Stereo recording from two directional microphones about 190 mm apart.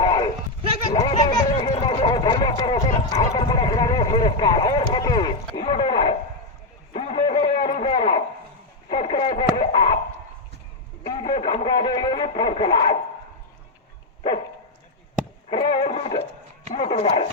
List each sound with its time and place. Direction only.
0.0 s sheep: 20° left (ahead or behind)
0.9 s a sound: 25° left (ahead or behind)
5.5 s speech: 25° left (ahead or behind)
6.9 s a sound: 30° left (ahead or behind)
8.9 s radio: 30° left (ahead or behind)
11.0 s speech: 25° left (ahead or behind)
15.4 s music: 30° left (ahead or behind)
16.7 s speech: 30° left (ahead or behind)